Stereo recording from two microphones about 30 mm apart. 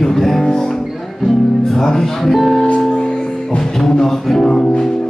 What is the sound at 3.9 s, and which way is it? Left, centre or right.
Music, centre.